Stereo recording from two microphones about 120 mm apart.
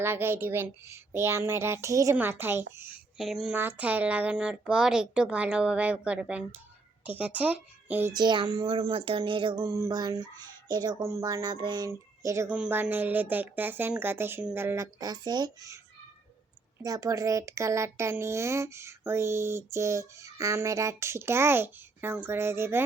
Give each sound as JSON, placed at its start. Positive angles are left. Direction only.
{"t": 0.0, "sound": "speech", "side_deg": -20}
{"t": 3.2, "sound": "speech", "side_deg": 0}
{"t": 3.5, "sound": "speech", "side_deg": -15}
{"t": 8.1, "sound": "speech", "side_deg": -35}
{"t": 9.6, "sound": "a sound", "side_deg": -30}
{"t": 11.9, "sound": "speech", "side_deg": -25}
{"t": 12.5, "sound": "speech", "side_deg": -10}
{"t": 16.8, "sound": "speech", "side_deg": -30}